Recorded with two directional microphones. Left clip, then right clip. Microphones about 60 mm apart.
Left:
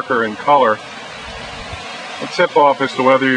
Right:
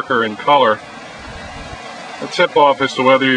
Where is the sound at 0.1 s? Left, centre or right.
Right.